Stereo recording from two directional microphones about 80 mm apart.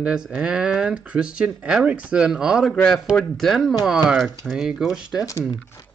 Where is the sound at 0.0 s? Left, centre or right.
Centre.